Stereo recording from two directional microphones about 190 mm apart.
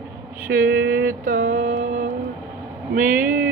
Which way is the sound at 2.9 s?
45° right (ahead or behind).